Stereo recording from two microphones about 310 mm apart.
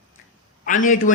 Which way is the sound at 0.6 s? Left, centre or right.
Left.